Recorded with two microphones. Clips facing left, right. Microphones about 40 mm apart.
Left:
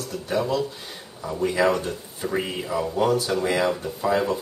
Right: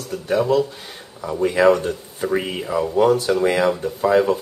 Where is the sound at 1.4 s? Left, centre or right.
Right.